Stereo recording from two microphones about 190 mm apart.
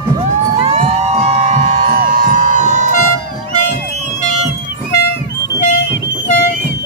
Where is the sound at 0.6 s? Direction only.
35° right (ahead or behind).